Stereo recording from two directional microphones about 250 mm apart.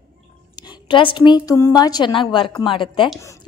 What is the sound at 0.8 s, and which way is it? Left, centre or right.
A woman's voice, centre.